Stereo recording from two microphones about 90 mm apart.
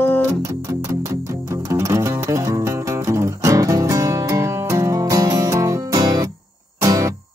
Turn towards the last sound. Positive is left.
turn(degrees=-40)  # may be behind; listen again after turning